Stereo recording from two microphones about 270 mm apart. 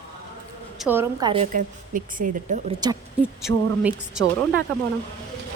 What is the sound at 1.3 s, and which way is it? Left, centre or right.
A woman's voice, right.